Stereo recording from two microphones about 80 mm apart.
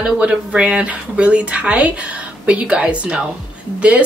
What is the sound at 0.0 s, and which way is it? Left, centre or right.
Speech, centre.